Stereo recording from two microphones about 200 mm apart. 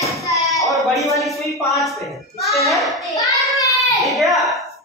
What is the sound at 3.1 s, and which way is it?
Child singing, 20° left (ahead or behind).